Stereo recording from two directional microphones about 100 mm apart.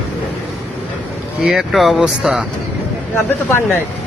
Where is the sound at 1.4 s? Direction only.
Centre (ahead or behind).